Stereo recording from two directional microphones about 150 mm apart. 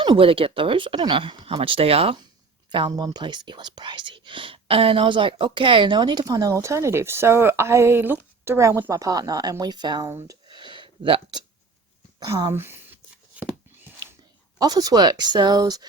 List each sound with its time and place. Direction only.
0.0 s speech: 35° right (ahead or behind)
2.7 s speech: 30° right (ahead or behind)
10.1 s speech: 15° right (ahead or behind)
10.4 s a sound: 30° right (ahead or behind)
12.2 s a sound: 20° right (ahead or behind)
14.6 s speech: 25° right (ahead or behind)